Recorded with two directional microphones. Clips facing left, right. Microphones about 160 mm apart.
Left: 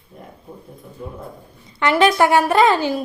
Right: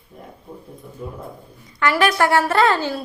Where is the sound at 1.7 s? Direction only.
20° left (ahead or behind).